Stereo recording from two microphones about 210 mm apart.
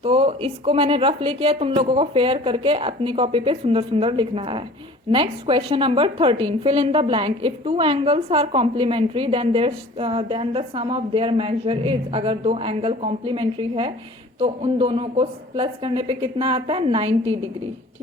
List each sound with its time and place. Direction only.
0.0 s a woman's voice: 25° right (ahead or behind)